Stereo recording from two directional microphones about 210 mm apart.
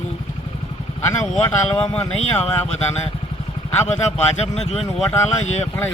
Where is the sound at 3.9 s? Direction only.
30° left (ahead or behind).